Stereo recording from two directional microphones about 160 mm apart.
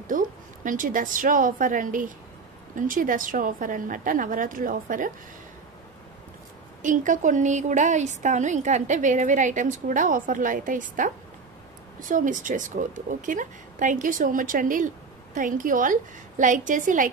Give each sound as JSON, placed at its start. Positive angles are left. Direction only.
{"t": 0.0, "sound": "a woman's voice", "side_deg": -55}
{"t": 6.8, "sound": "a woman's voice", "side_deg": -55}
{"t": 12.1, "sound": "a woman's voice", "side_deg": -55}